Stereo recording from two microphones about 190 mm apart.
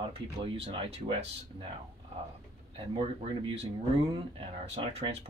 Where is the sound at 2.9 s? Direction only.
30° right (ahead or behind).